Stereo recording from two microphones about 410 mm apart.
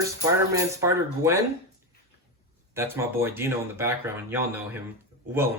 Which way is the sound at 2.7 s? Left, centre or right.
Centre.